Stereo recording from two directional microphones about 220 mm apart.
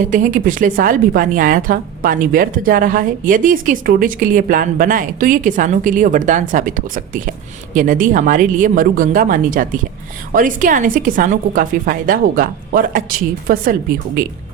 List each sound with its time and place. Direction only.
0.1 s a woman's voice: 35° right (ahead or behind)